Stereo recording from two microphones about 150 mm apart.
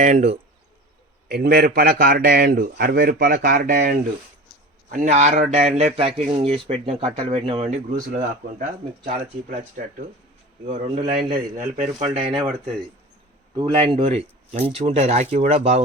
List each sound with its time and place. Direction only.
0.0 s speech: 50° right (ahead or behind)
1.3 s a man's voice: 90° right
4.9 s speech: 55° right (ahead or behind)
7.9 s speech: 65° right (ahead or behind)
9.1 s speech: 45° right (ahead or behind)
10.7 s speech: 50° right (ahead or behind)
11.3 s speech: 65° right (ahead or behind)
11.9 s speech: 45° right (ahead or behind)
13.7 s speech: 40° right (ahead or behind)